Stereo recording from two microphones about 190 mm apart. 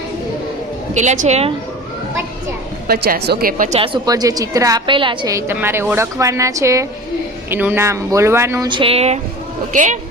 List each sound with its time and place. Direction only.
0.9 s a woman's voice: 40° right (ahead or behind)
2.8 s a woman's voice: 50° right (ahead or behind)
3.8 s a woman's voice: 20° right (ahead or behind); by 10.0 s 40° right (ahead or behind)